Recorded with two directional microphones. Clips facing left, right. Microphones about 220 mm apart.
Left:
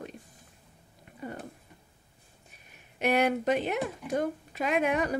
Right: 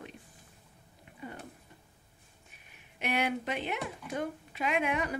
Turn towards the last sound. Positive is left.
turn(degrees=40)  # may be behind; listen again after turning